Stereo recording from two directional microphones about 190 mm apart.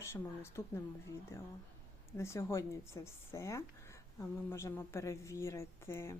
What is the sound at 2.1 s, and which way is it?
Speech, 15° left (ahead or behind).